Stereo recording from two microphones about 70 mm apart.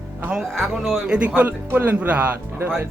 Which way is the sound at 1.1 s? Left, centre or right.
Right.